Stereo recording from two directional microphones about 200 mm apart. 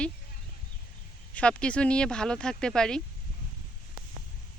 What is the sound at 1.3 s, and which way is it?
Speech, 5° left (ahead or behind).